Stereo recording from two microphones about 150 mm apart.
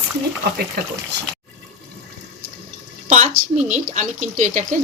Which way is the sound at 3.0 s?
50° right (ahead or behind).